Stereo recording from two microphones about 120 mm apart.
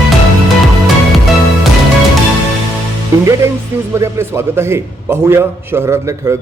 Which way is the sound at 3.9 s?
20° right (ahead or behind).